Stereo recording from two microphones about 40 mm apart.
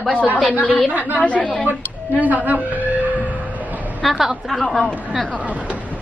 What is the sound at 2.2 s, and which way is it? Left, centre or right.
Speech, right.